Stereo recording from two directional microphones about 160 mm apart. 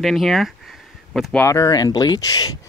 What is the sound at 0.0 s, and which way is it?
Speech, centre (ahead or behind).